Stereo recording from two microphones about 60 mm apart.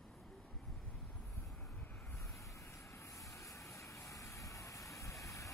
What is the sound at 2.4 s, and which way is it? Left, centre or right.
Vehicle, left.